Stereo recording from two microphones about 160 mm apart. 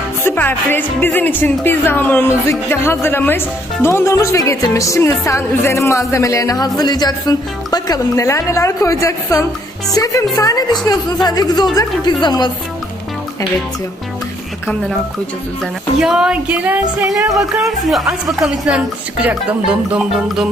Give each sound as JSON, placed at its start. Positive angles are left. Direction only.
{"t": 0.2, "sound": "speech", "side_deg": 10}
{"t": 15.6, "sound": "a woman's voice", "side_deg": -5}
{"t": 17.6, "sound": "a woman's voice", "side_deg": 0}